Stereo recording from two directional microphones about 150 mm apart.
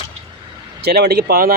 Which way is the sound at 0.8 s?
90° right.